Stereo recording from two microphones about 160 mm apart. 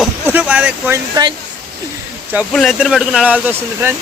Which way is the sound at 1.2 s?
25° right (ahead or behind).